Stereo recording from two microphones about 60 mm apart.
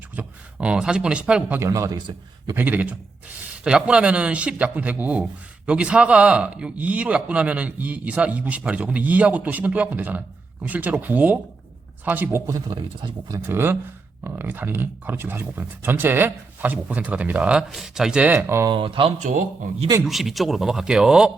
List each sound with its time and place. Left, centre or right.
0.2 s speech: centre
1.7 s speech: right
2.6 s a man's voice: right
3.6 s a man's voice: centre; by 12.4 s right
12.5 s speech: right
13.5 s a man's voice: right; by 17.7 s centre
17.7 s speech: centre
18.3 s speech: right
20.1 s speech: centre